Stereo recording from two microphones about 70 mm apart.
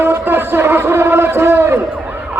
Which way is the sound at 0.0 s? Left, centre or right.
Right.